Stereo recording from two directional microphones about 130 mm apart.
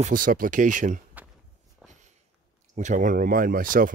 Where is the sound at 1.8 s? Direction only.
5° right (ahead or behind).